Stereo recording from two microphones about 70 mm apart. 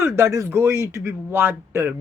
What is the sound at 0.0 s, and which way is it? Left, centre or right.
A man's voice, right.